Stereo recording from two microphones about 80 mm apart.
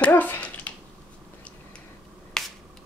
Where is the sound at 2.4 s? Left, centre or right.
Centre.